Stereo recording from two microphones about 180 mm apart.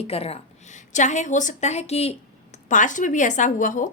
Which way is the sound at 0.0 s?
35° left (ahead or behind).